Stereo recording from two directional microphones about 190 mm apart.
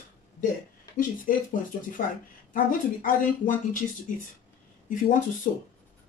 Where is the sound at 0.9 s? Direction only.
45° left (ahead or behind).